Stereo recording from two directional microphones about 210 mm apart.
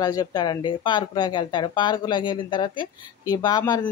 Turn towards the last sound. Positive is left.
turn(degrees=20)  # may be behind; listen again after turning